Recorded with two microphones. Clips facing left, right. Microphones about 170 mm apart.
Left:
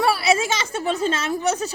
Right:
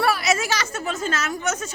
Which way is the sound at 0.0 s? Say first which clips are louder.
Left 2 dB; 30° left (ahead or behind).